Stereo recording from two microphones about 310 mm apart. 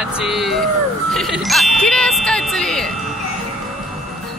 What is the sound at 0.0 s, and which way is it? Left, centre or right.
Speech, centre.